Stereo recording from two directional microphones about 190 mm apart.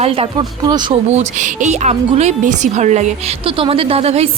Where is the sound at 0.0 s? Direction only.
30° right (ahead or behind).